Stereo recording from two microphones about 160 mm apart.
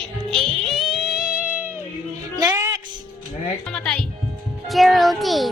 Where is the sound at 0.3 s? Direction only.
5° left (ahead or behind).